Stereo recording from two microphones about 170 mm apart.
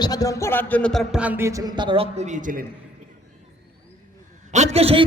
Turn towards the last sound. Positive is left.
turn(degrees=-35)  # may be behind; listen again after turning